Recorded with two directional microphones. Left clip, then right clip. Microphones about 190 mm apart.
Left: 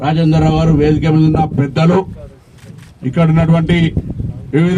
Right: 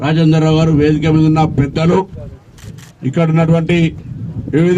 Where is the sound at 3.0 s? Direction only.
20° left (ahead or behind).